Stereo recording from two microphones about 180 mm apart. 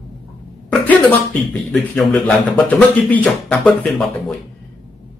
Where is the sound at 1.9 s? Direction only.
5° left (ahead or behind).